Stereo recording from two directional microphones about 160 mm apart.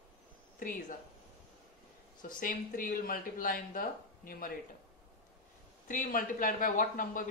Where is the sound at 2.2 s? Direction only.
60° left (ahead or behind).